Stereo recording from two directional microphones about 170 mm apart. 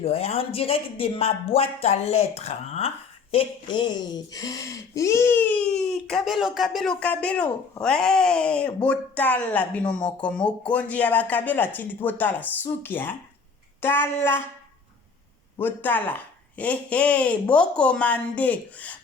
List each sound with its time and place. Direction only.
0.0 s a man's voice: 35° left (ahead or behind); by 14.4 s 15° left (ahead or behind)
15.5 s speech: 10° left (ahead or behind)